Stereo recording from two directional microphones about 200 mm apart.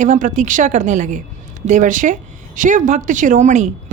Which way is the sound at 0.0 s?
40° right (ahead or behind).